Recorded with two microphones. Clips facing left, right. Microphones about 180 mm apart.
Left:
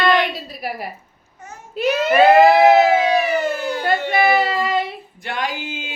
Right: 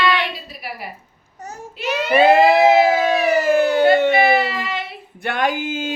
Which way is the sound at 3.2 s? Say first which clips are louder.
Right 5 dB; 85° right.